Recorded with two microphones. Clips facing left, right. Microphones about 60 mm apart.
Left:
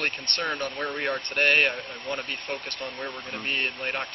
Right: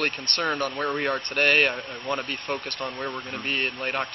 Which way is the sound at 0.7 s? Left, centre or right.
Right.